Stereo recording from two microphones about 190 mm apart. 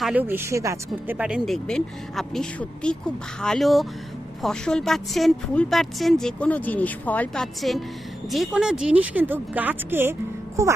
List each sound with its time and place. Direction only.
0.0 s a woman's voice: 5° right (ahead or behind)